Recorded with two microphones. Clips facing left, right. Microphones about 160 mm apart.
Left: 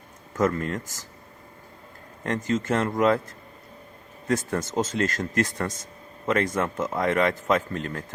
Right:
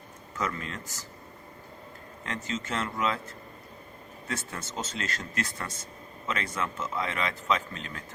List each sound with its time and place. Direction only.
0.3 s a man's voice: 45° left (ahead or behind)
2.2 s a man's voice: 45° left (ahead or behind)
4.3 s a man's voice: 45° left (ahead or behind)